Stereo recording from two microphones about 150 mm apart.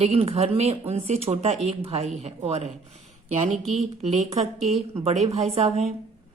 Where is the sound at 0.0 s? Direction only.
40° right (ahead or behind).